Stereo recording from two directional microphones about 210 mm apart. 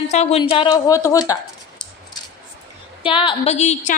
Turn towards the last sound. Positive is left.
turn(degrees=35)  # may be behind; listen again after turning